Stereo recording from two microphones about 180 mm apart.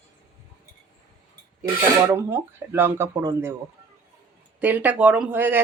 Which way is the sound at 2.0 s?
10° right (ahead or behind).